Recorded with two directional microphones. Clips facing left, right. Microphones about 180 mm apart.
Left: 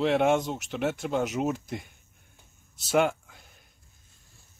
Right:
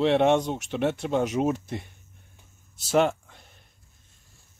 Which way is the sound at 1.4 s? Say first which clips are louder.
Right 4 dB; 15° right (ahead or behind).